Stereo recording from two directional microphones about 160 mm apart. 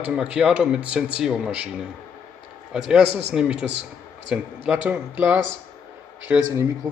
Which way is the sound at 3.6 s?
90° right.